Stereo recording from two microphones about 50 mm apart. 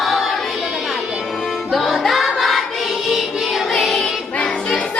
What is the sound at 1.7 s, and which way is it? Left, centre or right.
Music, centre.